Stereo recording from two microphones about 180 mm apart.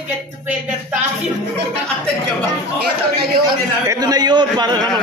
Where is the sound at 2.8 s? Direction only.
60° right (ahead or behind).